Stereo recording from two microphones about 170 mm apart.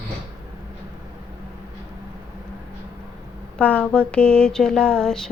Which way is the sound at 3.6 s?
5° left (ahead or behind).